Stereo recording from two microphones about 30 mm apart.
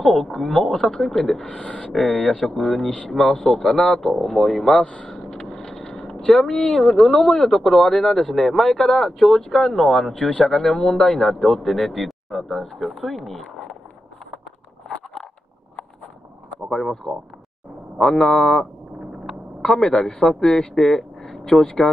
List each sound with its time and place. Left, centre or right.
0.0 s speech: centre
1.5 s speech: left
2.0 s speech: centre
5.0 s vehicle: centre
6.7 s speech: centre
8.6 s speech: left
8.9 s speech: centre
16.7 s speech: centre
19.8 s speech: left
20.8 s a sound: centre